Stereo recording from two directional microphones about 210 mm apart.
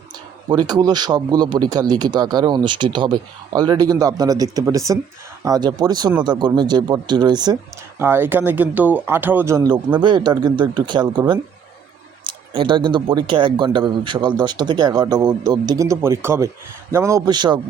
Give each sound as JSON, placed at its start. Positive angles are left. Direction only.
{"t": 0.4, "sound": "speech", "side_deg": -20}